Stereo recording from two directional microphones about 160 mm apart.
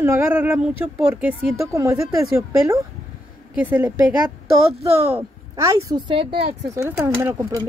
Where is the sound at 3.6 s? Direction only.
10° right (ahead or behind).